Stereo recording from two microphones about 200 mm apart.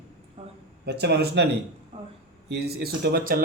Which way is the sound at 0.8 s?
55° right (ahead or behind).